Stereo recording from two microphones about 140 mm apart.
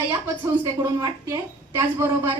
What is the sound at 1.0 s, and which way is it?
A woman's voice, 25° right (ahead or behind).